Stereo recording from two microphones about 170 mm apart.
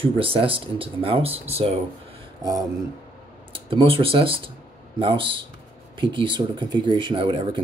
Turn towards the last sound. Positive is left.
turn(degrees=-30)  # may be behind; listen again after turning